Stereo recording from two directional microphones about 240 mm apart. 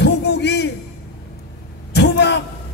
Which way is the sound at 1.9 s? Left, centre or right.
Left.